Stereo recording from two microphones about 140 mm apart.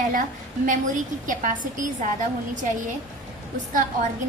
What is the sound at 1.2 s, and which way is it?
Speech, 70° right (ahead or behind).